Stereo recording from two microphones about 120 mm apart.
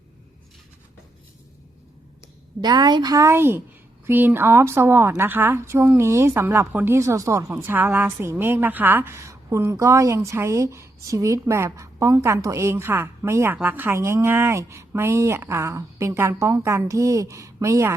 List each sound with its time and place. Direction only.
2.6 s a woman's voice: 35° right (ahead or behind)